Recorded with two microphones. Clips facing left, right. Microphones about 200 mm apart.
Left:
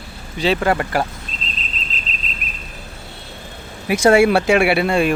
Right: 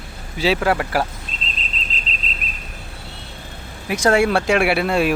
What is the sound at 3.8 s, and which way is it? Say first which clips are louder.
Speech: left 4 dB; 10° left (ahead or behind).